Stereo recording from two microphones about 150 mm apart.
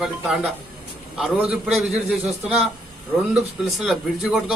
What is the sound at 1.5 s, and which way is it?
Speech, centre (ahead or behind).